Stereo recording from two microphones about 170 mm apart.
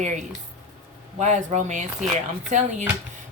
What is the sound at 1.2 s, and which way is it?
Speech, 45° right (ahead or behind).